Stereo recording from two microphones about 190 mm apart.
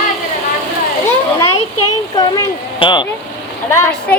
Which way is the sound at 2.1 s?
20° left (ahead or behind).